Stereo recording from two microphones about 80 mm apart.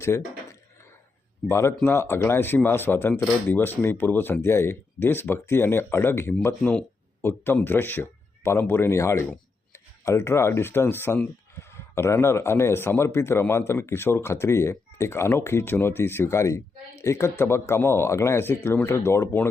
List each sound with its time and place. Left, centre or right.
0.1 s speech: left
1.5 s speech: left
6.6 s speech: centre
7.2 s speech: left